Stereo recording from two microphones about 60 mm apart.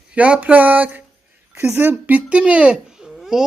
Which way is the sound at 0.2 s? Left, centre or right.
Right.